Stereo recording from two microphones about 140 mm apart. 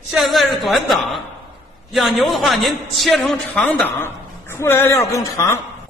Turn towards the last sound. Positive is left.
turn(degrees=20)  # may be behind; listen again after turning